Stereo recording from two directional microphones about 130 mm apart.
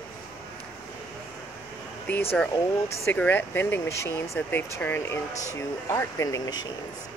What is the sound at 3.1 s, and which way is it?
Speech, 15° left (ahead or behind).